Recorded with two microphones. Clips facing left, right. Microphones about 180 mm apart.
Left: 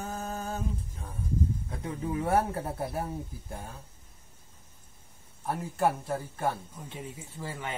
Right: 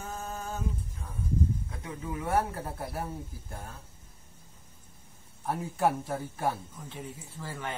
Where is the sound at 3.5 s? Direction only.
15° left (ahead or behind).